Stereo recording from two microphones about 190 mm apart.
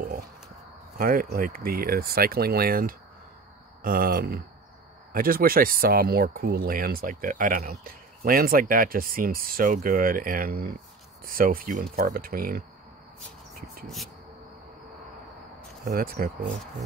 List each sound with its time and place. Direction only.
0.9 s speech: 50° right (ahead or behind)
15.8 s speech: 50° right (ahead or behind)